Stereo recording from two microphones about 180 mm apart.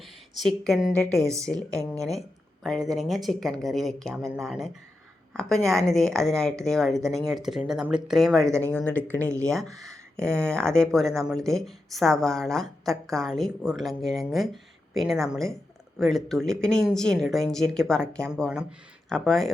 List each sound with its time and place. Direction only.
0.0 s a woman's voice: centre (ahead or behind)
8.4 s speech: 15° right (ahead or behind)
9.0 s speech: 10° left (ahead or behind)